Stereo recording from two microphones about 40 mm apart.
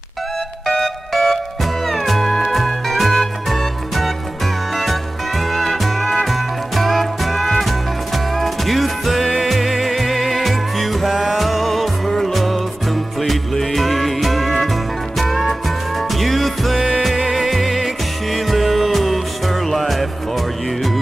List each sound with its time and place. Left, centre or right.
0.8 s music: centre